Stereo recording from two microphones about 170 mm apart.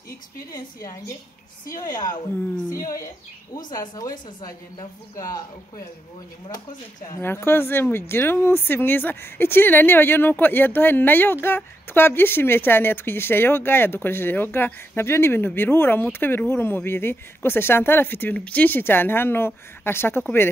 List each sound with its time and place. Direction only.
0.5 s a woman's voice: 20° left (ahead or behind)
2.7 s a woman's voice: 20° left (ahead or behind)
7.1 s a woman's voice: 15° left (ahead or behind)